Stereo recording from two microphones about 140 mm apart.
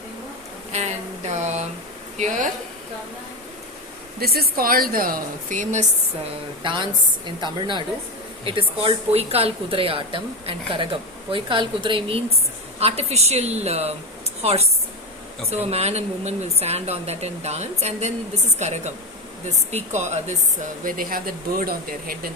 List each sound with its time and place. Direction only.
0.7 s a sound: 55° right (ahead or behind)
2.1 s speech: 60° right (ahead or behind)
4.2 s a woman's voice: 90° right; by 5.8 s 65° right (ahead or behind)
6.6 s a woman's voice: 35° right (ahead or behind); by 20.3 s 55° right (ahead or behind)
20.8 s a woman's voice: 80° right